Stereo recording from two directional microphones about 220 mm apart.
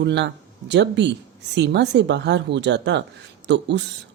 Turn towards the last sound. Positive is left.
turn(degrees=-55)  # may be behind; listen again after turning